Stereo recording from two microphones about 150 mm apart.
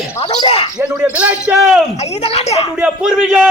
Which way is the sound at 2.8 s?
5° right (ahead or behind).